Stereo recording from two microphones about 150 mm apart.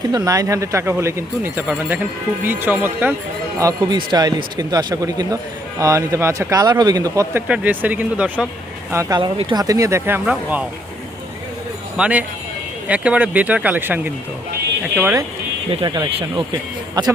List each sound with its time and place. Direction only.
0.1 s speech: 20° right (ahead or behind)
3.6 s speech: 25° right (ahead or behind)
7.4 s speech: 10° right (ahead or behind)
8.9 s speech: 20° right (ahead or behind)
9.1 s speech: 30° right (ahead or behind)
10.2 s speech: 10° right (ahead or behind)
11.9 s speech: 10° right (ahead or behind)
15.7 s speech: 35° right (ahead or behind)